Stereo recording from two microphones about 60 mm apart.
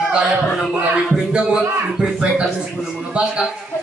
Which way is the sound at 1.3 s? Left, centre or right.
Centre.